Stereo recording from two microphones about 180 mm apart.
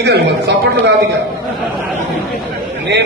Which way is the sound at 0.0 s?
70° right (ahead or behind).